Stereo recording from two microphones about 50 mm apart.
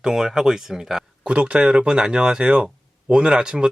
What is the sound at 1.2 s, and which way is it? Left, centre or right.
Speech, right.